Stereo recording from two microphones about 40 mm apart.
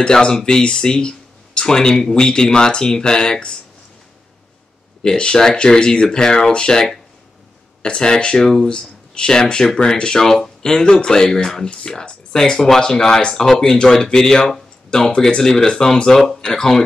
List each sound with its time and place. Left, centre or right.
0.0 s speech: left
5.0 s speech: left
8.6 s speech: left